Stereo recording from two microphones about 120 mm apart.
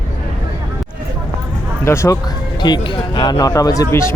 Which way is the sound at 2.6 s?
40° left (ahead or behind).